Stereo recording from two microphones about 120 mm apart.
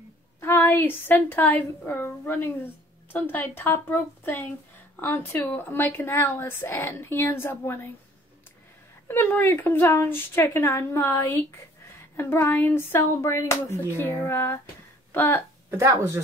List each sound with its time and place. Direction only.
0.4 s a woman's voice: 20° left (ahead or behind)
9.0 s a woman's voice: 20° left (ahead or behind)